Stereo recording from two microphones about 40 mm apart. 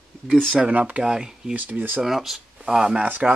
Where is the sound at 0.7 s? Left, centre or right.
Right.